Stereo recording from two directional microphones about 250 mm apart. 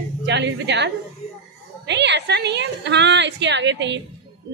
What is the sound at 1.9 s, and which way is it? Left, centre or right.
A woman's voice, right.